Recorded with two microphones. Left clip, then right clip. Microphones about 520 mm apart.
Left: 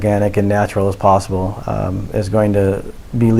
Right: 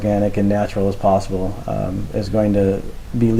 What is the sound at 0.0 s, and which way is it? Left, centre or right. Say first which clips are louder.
Speech: left 3 dB; left.